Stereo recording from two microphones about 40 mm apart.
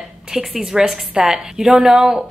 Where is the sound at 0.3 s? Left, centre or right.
Centre.